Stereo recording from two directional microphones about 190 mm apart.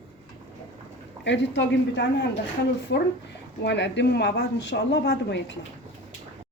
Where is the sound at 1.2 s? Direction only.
70° left (ahead or behind).